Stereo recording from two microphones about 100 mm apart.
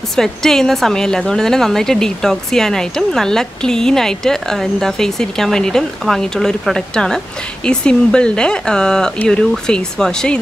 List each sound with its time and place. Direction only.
0.1 s speech: 5° left (ahead or behind)